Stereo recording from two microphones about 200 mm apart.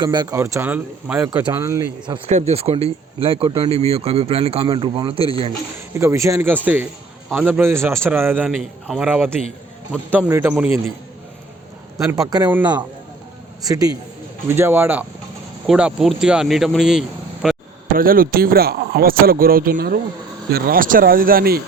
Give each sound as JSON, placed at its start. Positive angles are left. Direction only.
{"t": 0.0, "sound": "a man's voice", "side_deg": -20}
{"t": 2.5, "sound": "speech", "side_deg": -30}
{"t": 5.9, "sound": "a man's voice", "side_deg": -15}
{"t": 12.3, "sound": "a man's voice", "side_deg": -15}
{"t": 17.8, "sound": "speech", "side_deg": -45}